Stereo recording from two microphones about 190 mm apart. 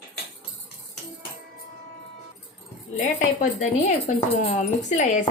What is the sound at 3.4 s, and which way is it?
Speech, 40° left (ahead or behind).